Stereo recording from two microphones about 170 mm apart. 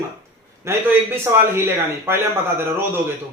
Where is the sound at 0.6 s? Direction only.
15° right (ahead or behind).